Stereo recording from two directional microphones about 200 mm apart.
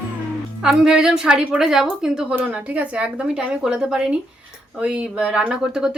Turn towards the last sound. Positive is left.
turn(degrees=-5)  # may be behind; listen again after turning